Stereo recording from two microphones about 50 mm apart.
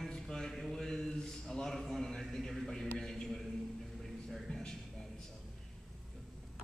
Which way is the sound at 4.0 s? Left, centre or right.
Centre.